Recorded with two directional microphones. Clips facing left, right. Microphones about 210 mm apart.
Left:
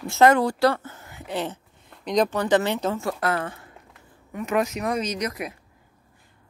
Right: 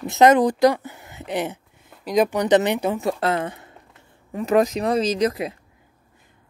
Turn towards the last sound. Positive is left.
turn(degrees=-30)  # may be behind; listen again after turning